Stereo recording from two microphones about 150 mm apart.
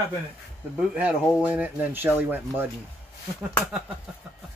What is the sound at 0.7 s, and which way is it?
Speech, 5° right (ahead or behind).